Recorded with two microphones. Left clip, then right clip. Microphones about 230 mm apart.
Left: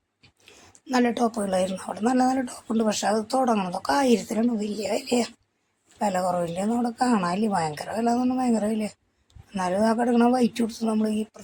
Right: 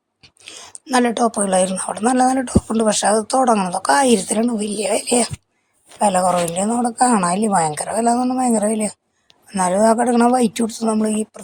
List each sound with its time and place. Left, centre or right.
0.2 s speech: centre